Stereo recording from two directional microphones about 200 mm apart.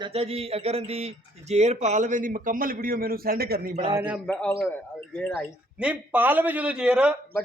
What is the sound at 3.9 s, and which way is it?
Speech, 5° right (ahead or behind).